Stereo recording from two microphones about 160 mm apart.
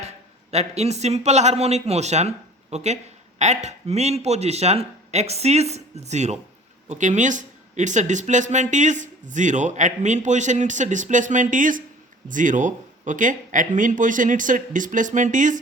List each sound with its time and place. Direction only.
0.5 s a man's voice: 40° right (ahead or behind)